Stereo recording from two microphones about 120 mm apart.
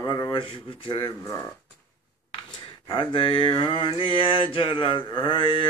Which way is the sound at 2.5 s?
40° left (ahead or behind).